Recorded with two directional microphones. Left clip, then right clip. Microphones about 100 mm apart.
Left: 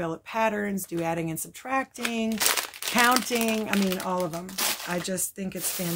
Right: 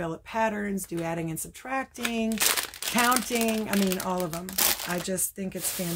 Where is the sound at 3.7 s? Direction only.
15° right (ahead or behind).